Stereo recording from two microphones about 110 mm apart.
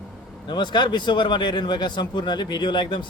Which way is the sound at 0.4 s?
45° left (ahead or behind).